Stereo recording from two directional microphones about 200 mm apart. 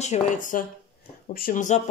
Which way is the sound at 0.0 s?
35° left (ahead or behind).